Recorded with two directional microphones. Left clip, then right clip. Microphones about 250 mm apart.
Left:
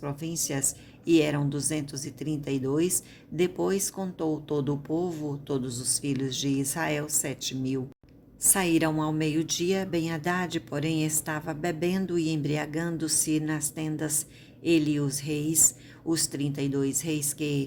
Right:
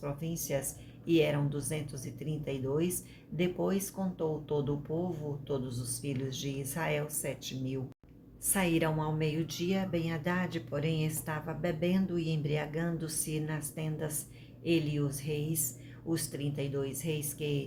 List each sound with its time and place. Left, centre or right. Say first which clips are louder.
0.0 s speech: left 6 dB; left
6.0 s speech: left 6 dB; left